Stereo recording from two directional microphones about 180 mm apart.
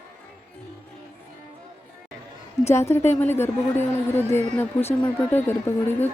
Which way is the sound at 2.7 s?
15° left (ahead or behind).